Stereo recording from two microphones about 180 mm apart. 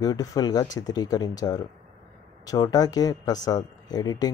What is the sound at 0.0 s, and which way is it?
Speech, 20° left (ahead or behind).